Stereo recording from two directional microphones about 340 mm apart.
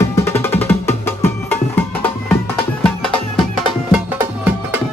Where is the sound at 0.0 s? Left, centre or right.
Centre.